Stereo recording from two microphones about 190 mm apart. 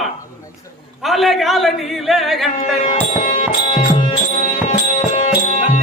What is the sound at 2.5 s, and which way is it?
Music, 35° left (ahead or behind).